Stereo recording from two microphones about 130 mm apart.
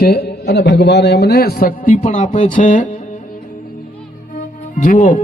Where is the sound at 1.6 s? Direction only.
90° left.